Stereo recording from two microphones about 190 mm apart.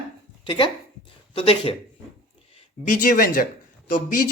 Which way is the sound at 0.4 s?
25° left (ahead or behind).